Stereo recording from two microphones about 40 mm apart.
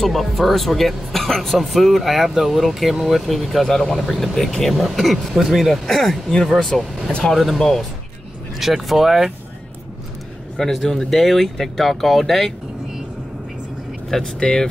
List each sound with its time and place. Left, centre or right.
0.0 s speech: centre
8.5 s speech: centre
10.6 s speech: centre
14.4 s speech: centre